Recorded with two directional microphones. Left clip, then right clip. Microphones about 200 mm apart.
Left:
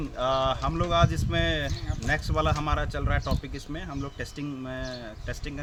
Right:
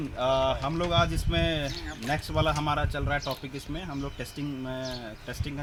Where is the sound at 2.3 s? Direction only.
Centre (ahead or behind).